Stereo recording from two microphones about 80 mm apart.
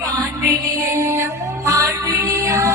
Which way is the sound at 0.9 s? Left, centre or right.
Right.